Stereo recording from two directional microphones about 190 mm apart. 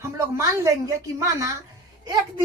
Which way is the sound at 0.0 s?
15° right (ahead or behind).